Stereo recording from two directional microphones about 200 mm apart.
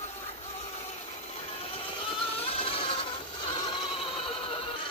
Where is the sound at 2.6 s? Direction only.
25° left (ahead or behind).